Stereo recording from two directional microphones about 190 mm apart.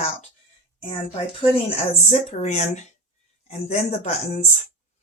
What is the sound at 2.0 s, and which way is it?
Speech, 35° left (ahead or behind).